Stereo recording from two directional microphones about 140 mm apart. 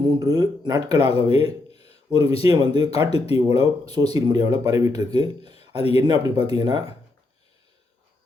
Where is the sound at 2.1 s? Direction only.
25° right (ahead or behind).